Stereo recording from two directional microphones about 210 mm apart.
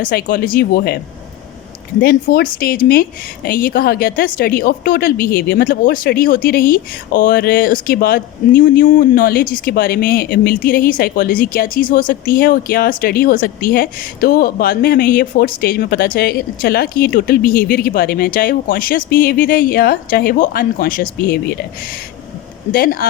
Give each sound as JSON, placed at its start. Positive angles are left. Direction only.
{"t": 0.0, "sound": "a woman's voice", "side_deg": 45}
{"t": 2.0, "sound": "a woman's voice", "side_deg": 45}
{"t": 22.7, "sound": "a woman's voice", "side_deg": 45}